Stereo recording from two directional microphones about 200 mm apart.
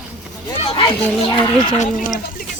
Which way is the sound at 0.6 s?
25° left (ahead or behind).